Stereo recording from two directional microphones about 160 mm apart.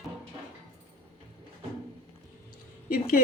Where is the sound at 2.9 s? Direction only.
65° left (ahead or behind).